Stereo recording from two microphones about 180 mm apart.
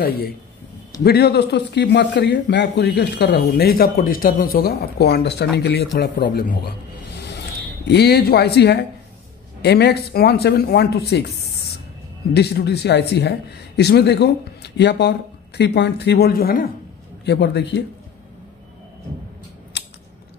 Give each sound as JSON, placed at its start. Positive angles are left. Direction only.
{"t": 1.0, "sound": "a man's voice", "side_deg": 60}
{"t": 7.2, "sound": "a sound", "side_deg": 70}
{"t": 9.6, "sound": "a man's voice", "side_deg": 65}
{"t": 12.4, "sound": "a man's voice", "side_deg": 65}
{"t": 17.2, "sound": "a man's voice", "side_deg": 70}